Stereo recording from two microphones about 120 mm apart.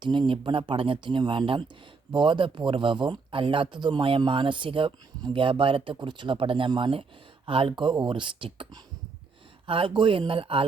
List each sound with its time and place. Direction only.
0.0 s speech: 40° right (ahead or behind)